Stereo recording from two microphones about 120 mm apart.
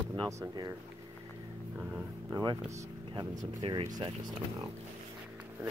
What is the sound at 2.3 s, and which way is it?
Speech, 35° right (ahead or behind).